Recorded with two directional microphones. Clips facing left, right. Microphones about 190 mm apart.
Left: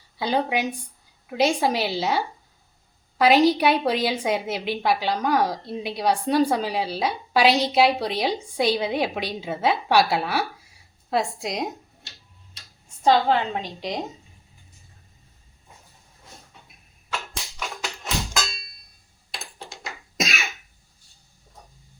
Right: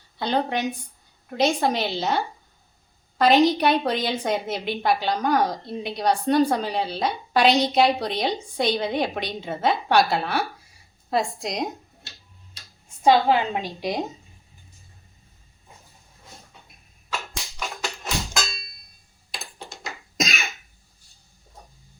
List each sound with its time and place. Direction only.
0.2 s a woman's voice: 5° left (ahead or behind)
13.1 s a woman's voice: 10° right (ahead or behind)
19.5 s cough: centre (ahead or behind)